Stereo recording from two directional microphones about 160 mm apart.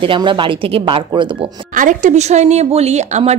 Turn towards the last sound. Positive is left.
turn(degrees=-45)  # may be behind; listen again after turning